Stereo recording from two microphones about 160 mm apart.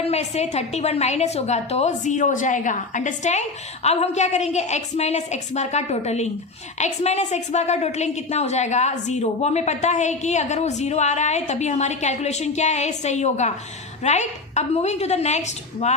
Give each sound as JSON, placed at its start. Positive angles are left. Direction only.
{"t": 0.1, "sound": "a woman's voice", "side_deg": 45}